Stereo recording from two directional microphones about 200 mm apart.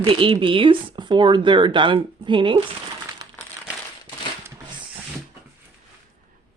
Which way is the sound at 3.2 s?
20° right (ahead or behind).